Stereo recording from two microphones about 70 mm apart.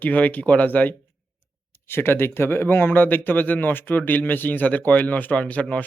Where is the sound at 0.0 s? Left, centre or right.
Left.